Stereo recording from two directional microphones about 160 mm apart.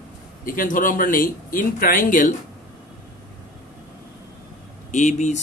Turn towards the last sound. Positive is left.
turn(degrees=50)  # may be behind; listen again after turning